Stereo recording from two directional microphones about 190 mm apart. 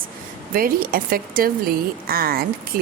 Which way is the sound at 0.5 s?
50° right (ahead or behind).